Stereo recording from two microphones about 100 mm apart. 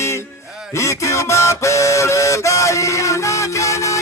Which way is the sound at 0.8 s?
30° left (ahead or behind).